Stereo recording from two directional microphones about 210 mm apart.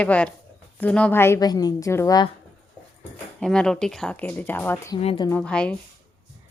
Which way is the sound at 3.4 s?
5° left (ahead or behind).